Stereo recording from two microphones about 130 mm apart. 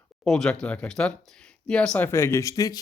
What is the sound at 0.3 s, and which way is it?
Speech, 5° left (ahead or behind).